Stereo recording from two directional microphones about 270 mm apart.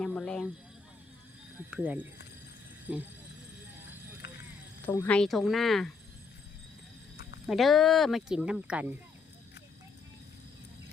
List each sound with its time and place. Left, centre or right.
0.0 s a sound: centre
1.7 s speech: centre
4.9 s speech: centre
7.4 s speech: centre